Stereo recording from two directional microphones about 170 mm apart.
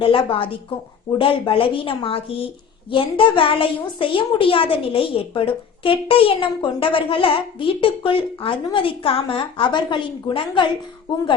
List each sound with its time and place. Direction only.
0.0 s a woman's voice: 30° left (ahead or behind)